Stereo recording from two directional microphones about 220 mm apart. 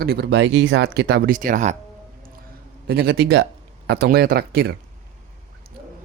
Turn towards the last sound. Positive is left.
turn(degrees=-45)  # may be behind; listen again after turning